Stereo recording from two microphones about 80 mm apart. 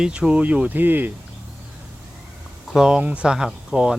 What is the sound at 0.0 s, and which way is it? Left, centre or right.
Speech, centre.